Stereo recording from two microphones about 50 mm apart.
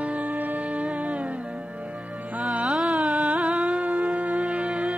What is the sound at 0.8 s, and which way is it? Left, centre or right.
Music, centre.